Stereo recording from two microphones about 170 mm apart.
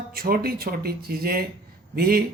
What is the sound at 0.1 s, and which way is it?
Speech, 60° right (ahead or behind).